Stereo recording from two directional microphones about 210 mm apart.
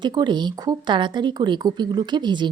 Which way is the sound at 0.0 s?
20° right (ahead or behind).